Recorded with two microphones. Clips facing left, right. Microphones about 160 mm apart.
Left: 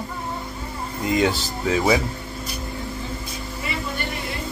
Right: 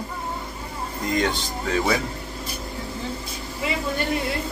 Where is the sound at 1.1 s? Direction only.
5° left (ahead or behind).